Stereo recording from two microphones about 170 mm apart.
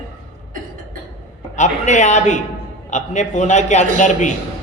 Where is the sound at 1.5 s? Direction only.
45° left (ahead or behind).